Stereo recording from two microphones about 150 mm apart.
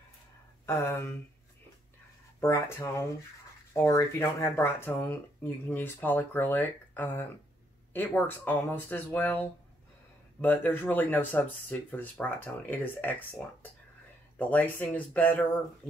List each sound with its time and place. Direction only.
0.7 s speech: 15° left (ahead or behind)
2.4 s speech: 15° left (ahead or behind)
10.4 s speech: 15° left (ahead or behind)